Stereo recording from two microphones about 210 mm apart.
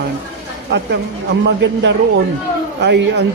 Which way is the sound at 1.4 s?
60° right (ahead or behind).